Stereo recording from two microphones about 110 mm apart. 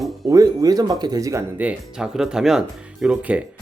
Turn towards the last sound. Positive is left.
turn(degrees=-10)  # may be behind; listen again after turning